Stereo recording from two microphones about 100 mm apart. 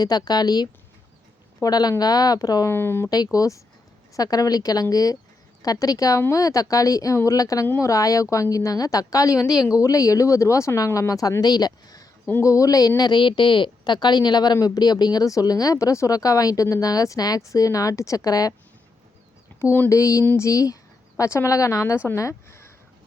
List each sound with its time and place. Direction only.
0.0 s a woman's voice: 40° left (ahead or behind)
2.7 s a woman's voice: 25° left (ahead or behind)
13.0 s a woman's voice: 50° left (ahead or behind)
19.5 s speech: 25° left (ahead or behind)
19.9 s a woman's voice: 35° left (ahead or behind)